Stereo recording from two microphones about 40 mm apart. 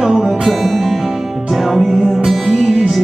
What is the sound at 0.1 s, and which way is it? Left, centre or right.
Music, centre.